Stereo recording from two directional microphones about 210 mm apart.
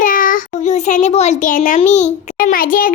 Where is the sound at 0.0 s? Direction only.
40° left (ahead or behind).